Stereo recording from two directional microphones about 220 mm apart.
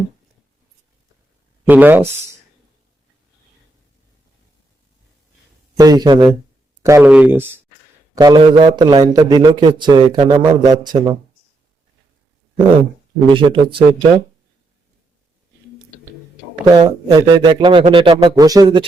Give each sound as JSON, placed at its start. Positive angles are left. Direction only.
{"t": 1.6, "sound": "speech", "side_deg": -10}
{"t": 5.7, "sound": "a man's voice", "side_deg": -15}
{"t": 13.2, "sound": "a man's voice", "side_deg": -20}
{"t": 16.6, "sound": "a man's voice", "side_deg": -20}